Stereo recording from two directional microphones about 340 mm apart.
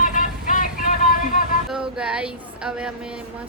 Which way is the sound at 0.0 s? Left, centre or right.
Left.